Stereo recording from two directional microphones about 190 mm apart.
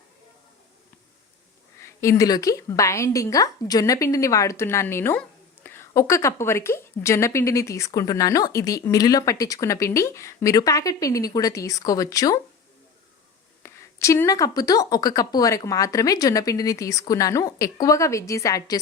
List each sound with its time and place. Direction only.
1.8 s a woman's voice: 15° left (ahead or behind)
13.6 s a woman's voice: 15° left (ahead or behind)